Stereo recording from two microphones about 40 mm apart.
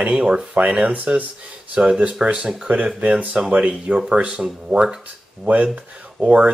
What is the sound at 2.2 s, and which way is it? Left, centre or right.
Speech, centre.